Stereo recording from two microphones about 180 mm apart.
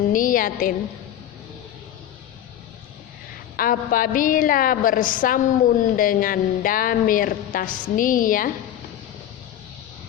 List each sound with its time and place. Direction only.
0.1 s a woman's voice: 50° left (ahead or behind)
3.6 s a woman's voice: 50° left (ahead or behind)